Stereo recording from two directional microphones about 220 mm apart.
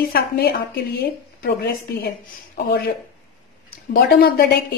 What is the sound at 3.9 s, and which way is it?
Speech, 45° left (ahead or behind).